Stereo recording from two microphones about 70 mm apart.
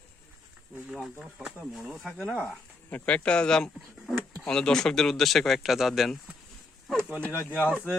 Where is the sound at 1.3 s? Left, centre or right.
Centre.